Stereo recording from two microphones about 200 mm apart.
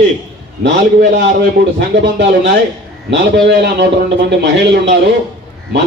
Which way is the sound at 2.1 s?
60° right (ahead or behind).